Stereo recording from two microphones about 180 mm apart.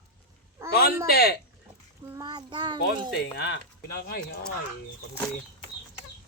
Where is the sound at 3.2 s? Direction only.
70° left (ahead or behind).